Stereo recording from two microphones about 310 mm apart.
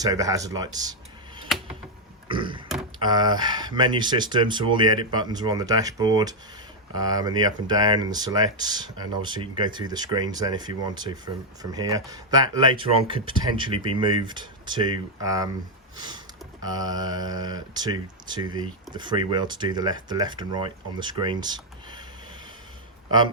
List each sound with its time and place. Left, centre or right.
0.0 s speech: centre
2.2 s a sound: centre
3.0 s speech: centre